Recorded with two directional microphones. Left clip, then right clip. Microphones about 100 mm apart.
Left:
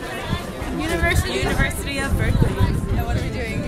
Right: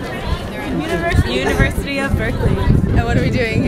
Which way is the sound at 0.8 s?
40° left (ahead or behind).